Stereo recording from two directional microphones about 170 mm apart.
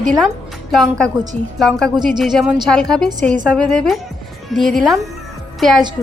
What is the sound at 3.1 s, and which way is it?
Speech, 50° right (ahead or behind).